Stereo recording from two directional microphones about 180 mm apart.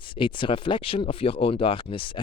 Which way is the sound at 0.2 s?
30° left (ahead or behind).